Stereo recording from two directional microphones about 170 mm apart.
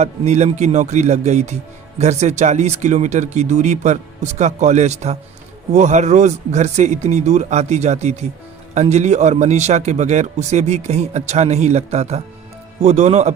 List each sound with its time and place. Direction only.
0.0 s a man's voice: 40° right (ahead or behind)